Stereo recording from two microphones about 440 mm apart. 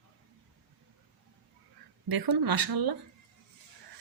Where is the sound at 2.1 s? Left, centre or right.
Right.